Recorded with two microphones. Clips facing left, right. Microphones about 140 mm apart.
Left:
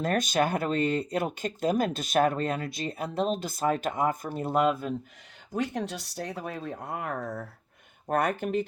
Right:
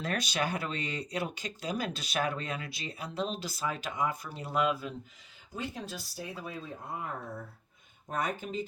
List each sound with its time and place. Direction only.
0.0 s speech: 45° left (ahead or behind)
5.5 s speech: 70° left (ahead or behind)
8.0 s speech: 65° left (ahead or behind)